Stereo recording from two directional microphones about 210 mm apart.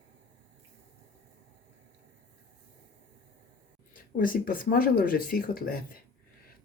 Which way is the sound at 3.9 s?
40° left (ahead or behind).